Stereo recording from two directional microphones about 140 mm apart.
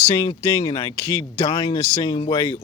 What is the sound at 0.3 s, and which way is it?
Speech, 25° left (ahead or behind).